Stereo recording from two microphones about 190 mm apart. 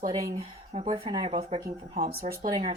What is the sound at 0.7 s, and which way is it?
A woman's voice, 30° right (ahead or behind).